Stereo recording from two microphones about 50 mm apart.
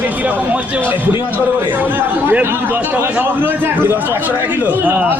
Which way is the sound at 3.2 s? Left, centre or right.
Right.